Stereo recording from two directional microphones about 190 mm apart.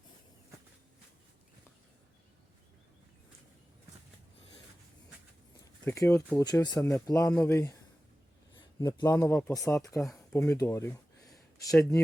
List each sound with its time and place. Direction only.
5.8 s speech: 15° left (ahead or behind)